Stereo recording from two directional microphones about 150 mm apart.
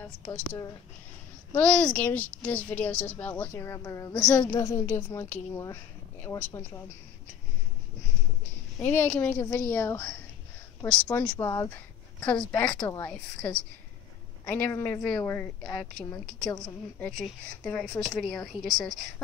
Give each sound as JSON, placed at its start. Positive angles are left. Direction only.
{"t": 1.5, "sound": "a woman's voice", "side_deg": 10}
{"t": 8.8, "sound": "a woman's voice", "side_deg": 15}
{"t": 12.7, "sound": "a woman's voice", "side_deg": 25}
{"t": 13.0, "sound": "a woman's voice", "side_deg": 5}
{"t": 14.6, "sound": "a woman's voice", "side_deg": 15}
{"t": 16.4, "sound": "a woman's voice", "side_deg": 30}
{"t": 17.0, "sound": "speech", "side_deg": 5}